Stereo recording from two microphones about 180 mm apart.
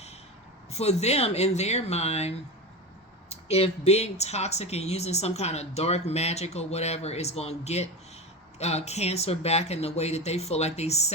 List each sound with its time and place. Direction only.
0.7 s speech: 35° left (ahead or behind)